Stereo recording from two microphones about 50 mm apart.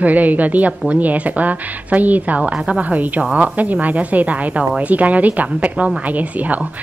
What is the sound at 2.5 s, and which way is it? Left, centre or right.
Speech, centre.